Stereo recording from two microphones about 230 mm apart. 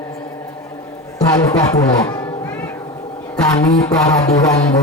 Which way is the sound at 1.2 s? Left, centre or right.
Centre.